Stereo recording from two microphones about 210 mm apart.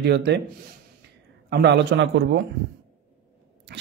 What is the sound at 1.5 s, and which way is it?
Speech, 50° right (ahead or behind).